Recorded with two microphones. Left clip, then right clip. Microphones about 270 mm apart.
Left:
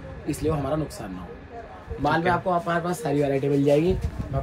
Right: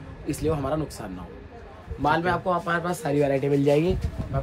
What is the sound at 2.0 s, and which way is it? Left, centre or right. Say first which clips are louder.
Speech: left 1 dB; centre.